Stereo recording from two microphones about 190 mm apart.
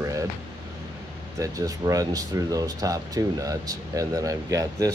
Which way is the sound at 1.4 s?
15° right (ahead or behind).